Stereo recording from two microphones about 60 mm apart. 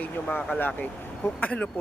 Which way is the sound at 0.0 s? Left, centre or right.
Left.